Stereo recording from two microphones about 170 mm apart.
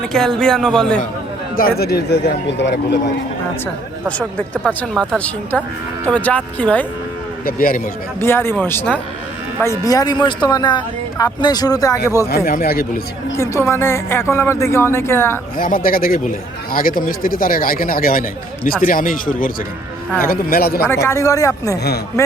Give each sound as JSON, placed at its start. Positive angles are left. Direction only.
{"t": 0.1, "sound": "a man's voice", "side_deg": 0}
{"t": 1.5, "sound": "speech", "side_deg": 65}
{"t": 4.2, "sound": "speech", "side_deg": 10}
{"t": 7.4, "sound": "speech", "side_deg": 55}
{"t": 8.2, "sound": "speech", "side_deg": 15}
{"t": 12.5, "sound": "speech", "side_deg": 60}
{"t": 13.3, "sound": "speech", "side_deg": 15}
{"t": 15.5, "sound": "speech", "side_deg": 55}
{"t": 20.8, "sound": "speech", "side_deg": 15}